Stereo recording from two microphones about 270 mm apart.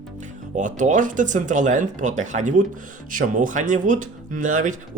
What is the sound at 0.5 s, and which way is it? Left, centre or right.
Speech, right.